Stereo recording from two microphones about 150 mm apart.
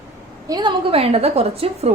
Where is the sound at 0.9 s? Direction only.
40° right (ahead or behind).